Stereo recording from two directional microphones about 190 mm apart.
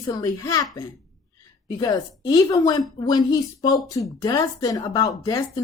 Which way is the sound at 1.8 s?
20° left (ahead or behind).